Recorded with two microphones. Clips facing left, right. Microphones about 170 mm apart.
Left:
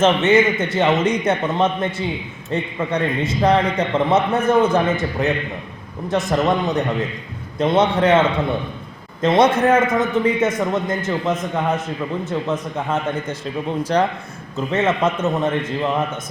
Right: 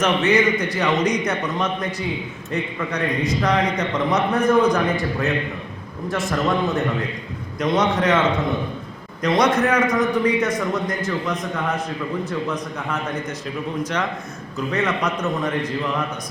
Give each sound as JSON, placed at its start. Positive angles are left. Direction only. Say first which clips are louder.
{"t": 0.0, "sound": "a man's voice", "louder": "left 3 dB", "side_deg": 25}
{"t": 6.1, "sound": "a man's voice", "louder": "left 3 dB", "side_deg": 20}
{"t": 9.2, "sound": "a man's voice", "louder": "left 3 dB", "side_deg": 25}